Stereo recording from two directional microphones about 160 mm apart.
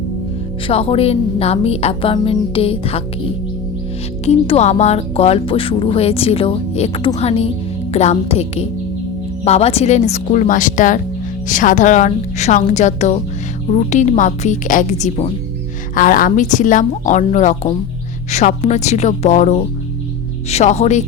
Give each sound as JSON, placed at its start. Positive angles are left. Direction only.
{"t": 0.7, "sound": "speech", "side_deg": 35}
{"t": 4.3, "sound": "a woman's voice", "side_deg": 40}
{"t": 16.0, "sound": "a woman's voice", "side_deg": 60}